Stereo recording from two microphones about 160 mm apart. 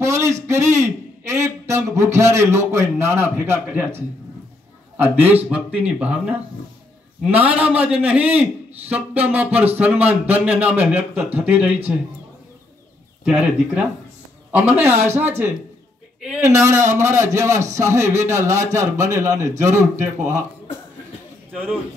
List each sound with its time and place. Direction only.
0.0 s a man's voice: 20° right (ahead or behind)
13.2 s a man's voice: 5° right (ahead or behind)
19.5 s a man's voice: 50° right (ahead or behind)